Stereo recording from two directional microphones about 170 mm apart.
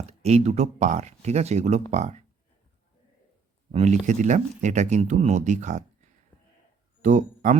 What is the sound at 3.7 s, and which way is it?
Speech, 40° right (ahead or behind).